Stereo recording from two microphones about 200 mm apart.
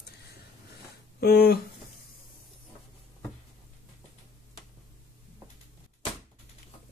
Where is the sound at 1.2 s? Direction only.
50° left (ahead or behind).